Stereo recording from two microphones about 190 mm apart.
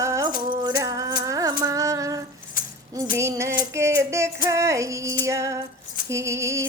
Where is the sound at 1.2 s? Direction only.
20° right (ahead or behind).